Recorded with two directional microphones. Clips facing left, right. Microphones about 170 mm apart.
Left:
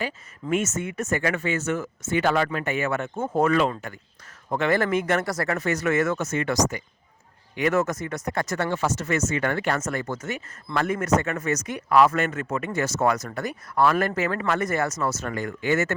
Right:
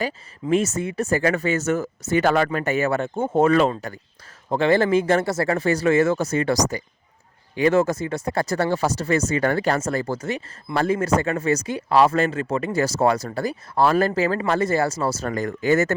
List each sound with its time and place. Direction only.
0.5 s speech: 35° right (ahead or behind)